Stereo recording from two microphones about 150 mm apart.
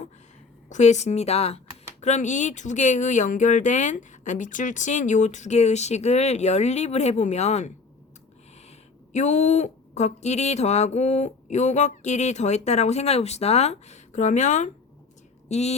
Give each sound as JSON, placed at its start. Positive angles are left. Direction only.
{"t": 0.7, "sound": "speech", "side_deg": 50}
{"t": 9.1, "sound": "speech", "side_deg": 50}